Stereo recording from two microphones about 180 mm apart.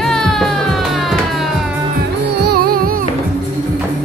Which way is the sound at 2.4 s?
60° right (ahead or behind).